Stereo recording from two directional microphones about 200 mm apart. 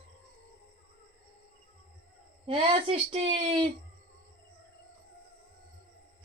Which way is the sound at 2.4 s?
25° right (ahead or behind).